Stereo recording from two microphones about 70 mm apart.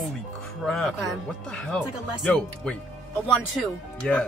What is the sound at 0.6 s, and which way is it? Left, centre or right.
Speech, centre.